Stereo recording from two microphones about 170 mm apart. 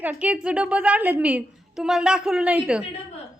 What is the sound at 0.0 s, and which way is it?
A woman's voice, 5° right (ahead or behind).